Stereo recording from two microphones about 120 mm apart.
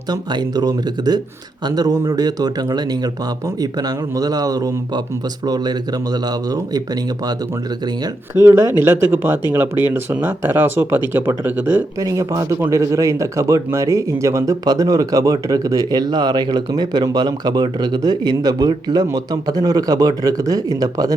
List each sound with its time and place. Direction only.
0.1 s speech: 35° right (ahead or behind)
8.4 s speech: 20° right (ahead or behind)
11.9 s speech: 30° right (ahead or behind)